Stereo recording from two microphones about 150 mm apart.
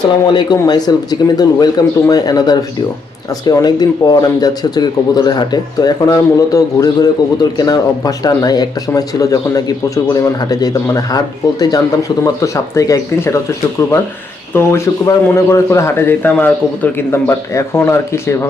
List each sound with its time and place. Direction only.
0.3 s a man's voice: 30° left (ahead or behind)